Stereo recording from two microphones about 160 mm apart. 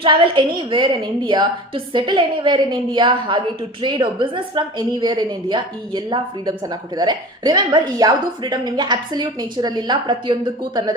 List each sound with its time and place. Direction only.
0.0 s a woman's voice: 30° right (ahead or behind)